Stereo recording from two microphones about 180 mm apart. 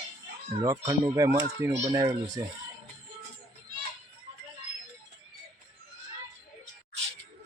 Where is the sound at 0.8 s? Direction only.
20° right (ahead or behind).